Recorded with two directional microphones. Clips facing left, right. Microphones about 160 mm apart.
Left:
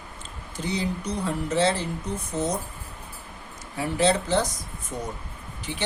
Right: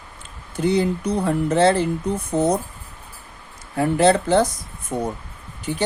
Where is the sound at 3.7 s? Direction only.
55° right (ahead or behind).